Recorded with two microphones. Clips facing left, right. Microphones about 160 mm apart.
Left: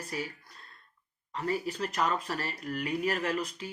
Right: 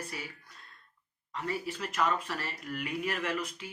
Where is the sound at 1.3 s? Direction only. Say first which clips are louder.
Left 3 dB; 35° left (ahead or behind).